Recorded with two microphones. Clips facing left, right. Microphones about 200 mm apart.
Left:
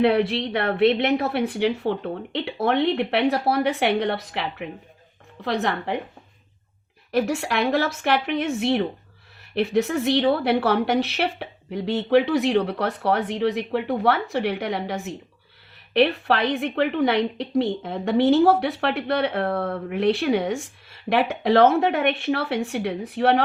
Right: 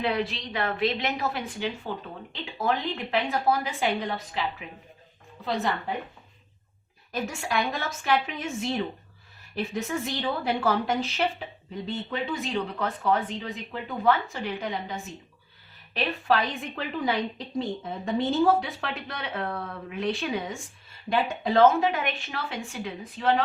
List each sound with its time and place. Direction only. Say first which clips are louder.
0.0 s a woman's voice: left 9 dB; 65° left (ahead or behind)
5.5 s a woman's voice: left 4 dB; 85° left
7.1 s a woman's voice: left 7 dB; 70° left (ahead or behind)